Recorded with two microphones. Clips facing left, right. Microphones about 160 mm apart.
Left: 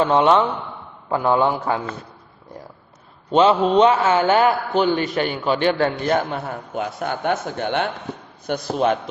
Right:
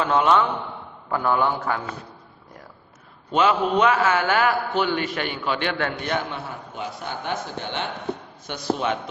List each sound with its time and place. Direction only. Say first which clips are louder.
0.0 s a man's voice: left 4 dB; 30° left (ahead or behind)
3.3 s a man's voice: left 5 dB; 30° left (ahead or behind); by 9.0 s 45° left (ahead or behind)